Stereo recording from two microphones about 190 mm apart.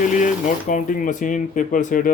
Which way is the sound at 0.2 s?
40° left (ahead or behind).